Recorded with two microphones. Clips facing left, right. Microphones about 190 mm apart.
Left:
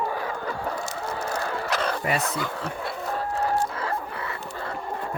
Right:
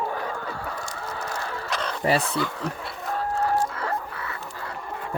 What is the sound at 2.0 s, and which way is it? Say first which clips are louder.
Speech: right 3 dB; 30° right (ahead or behind).